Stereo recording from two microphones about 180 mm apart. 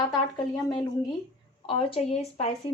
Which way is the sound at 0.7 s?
20° left (ahead or behind).